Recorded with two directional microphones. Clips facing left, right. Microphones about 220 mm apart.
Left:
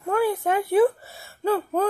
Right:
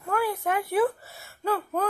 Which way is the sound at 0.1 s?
25° left (ahead or behind).